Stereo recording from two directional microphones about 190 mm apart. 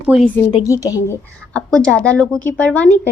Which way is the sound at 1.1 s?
5° left (ahead or behind).